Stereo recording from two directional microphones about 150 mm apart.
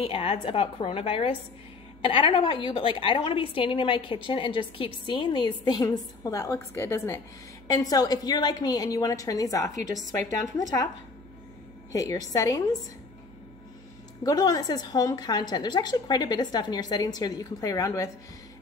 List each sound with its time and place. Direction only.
0.0 s a woman's voice: 35° left (ahead or behind)
11.9 s a woman's voice: 25° left (ahead or behind)
14.2 s a woman's voice: 25° left (ahead or behind)